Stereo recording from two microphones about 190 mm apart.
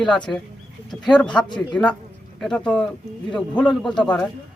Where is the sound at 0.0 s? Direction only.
5° left (ahead or behind).